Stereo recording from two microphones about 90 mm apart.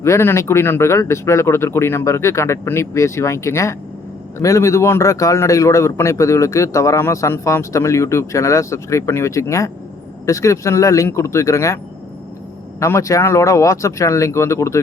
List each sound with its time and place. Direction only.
0.0 s a man's voice: 30° left (ahead or behind)
12.8 s a man's voice: 35° left (ahead or behind)